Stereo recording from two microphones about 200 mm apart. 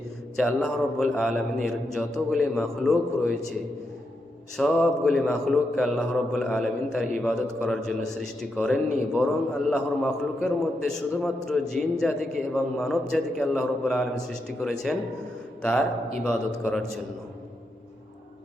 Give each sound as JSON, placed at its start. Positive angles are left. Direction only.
{"t": 0.3, "sound": "a man's voice", "side_deg": 0}
{"t": 4.5, "sound": "a man's voice", "side_deg": 0}
{"t": 16.2, "sound": "a man's voice", "side_deg": 0}